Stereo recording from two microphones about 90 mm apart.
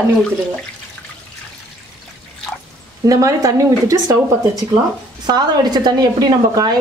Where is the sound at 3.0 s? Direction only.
40° right (ahead or behind).